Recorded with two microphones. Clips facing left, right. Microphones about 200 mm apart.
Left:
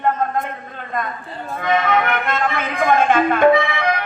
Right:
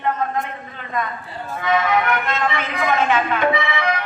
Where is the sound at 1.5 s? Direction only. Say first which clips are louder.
Left 1 dB; 50° left (ahead or behind).